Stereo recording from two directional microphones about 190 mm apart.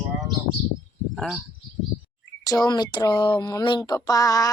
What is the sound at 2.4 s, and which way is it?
Speech, 20° left (ahead or behind).